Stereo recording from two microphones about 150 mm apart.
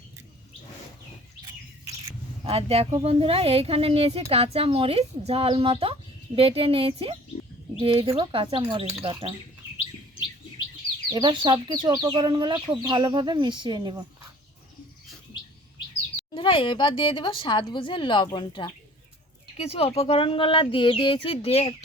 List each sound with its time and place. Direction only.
2.4 s speech: 40° right (ahead or behind)
11.1 s speech: 30° right (ahead or behind)
16.3 s speech: 35° left (ahead or behind)
19.5 s speech: 40° left (ahead or behind)